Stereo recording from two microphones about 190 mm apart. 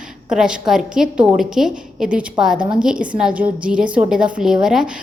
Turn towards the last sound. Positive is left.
turn(degrees=-5)  # may be behind; listen again after turning